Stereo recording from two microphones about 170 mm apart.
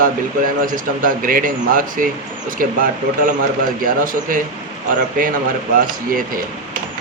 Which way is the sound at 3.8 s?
55° right (ahead or behind).